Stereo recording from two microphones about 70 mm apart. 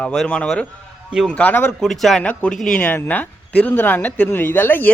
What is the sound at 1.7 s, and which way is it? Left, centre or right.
Speech, centre.